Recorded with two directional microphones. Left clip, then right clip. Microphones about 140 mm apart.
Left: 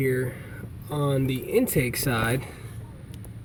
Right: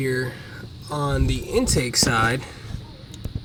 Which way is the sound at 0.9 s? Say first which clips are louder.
Right 1 dB; centre (ahead or behind).